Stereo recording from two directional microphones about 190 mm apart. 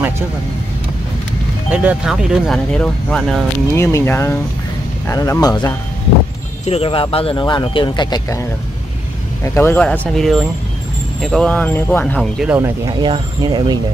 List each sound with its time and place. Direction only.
1.7 s speech: 5° right (ahead or behind)
3.7 s speech: 15° left (ahead or behind)
6.6 s speech: 30° left (ahead or behind); by 12.5 s centre (ahead or behind)
12.5 s speech: 15° right (ahead or behind)